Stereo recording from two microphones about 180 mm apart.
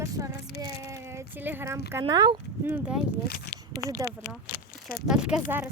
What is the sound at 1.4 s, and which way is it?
Speech, 10° right (ahead or behind).